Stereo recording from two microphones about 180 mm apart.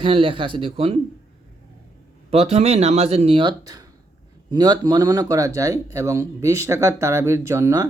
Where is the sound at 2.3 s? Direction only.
35° right (ahead or behind); by 7.8 s 15° right (ahead or behind).